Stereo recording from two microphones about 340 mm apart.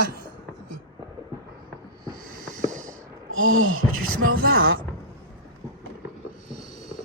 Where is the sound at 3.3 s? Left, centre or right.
Right.